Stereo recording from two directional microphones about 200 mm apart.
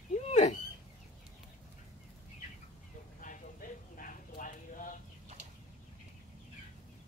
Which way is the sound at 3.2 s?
40° left (ahead or behind).